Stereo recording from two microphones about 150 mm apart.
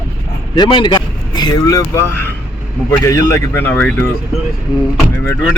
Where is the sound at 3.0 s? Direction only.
20° left (ahead or behind).